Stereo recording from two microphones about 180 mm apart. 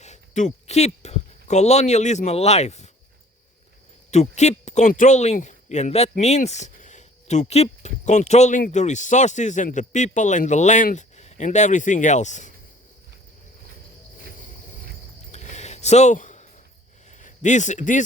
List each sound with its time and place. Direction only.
0.0 s speech: 40° left (ahead or behind)
4.1 s speech: 40° left (ahead or behind)
15.3 s a sound: 40° left (ahead or behind)